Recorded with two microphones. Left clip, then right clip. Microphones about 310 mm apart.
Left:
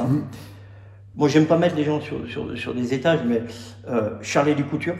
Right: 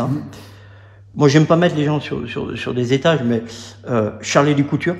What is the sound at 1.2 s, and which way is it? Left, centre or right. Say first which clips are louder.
A man's voice: right 4 dB; right.